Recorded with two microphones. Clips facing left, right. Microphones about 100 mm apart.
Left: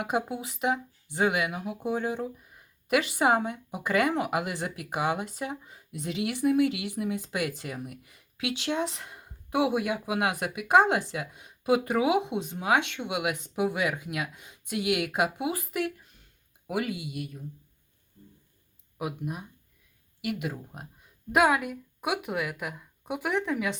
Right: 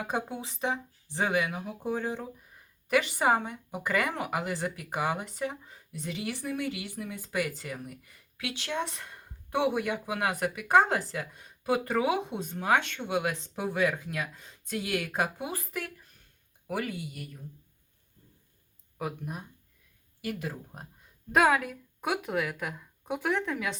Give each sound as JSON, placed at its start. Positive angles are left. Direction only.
{"t": 0.0, "sound": "speech", "side_deg": 10}
{"t": 18.9, "sound": "speech", "side_deg": 10}
{"t": 21.3, "sound": "speech", "side_deg": 5}